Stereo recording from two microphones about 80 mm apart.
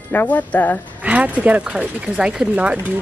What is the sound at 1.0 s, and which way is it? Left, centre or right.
Speech, centre.